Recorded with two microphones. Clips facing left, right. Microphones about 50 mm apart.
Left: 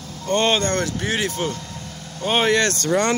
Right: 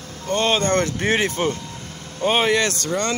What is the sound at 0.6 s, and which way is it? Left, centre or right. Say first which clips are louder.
Speech: right 3 dB; right.